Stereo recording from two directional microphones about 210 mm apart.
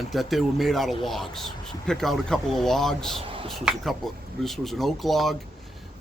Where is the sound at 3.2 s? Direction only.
25° right (ahead or behind).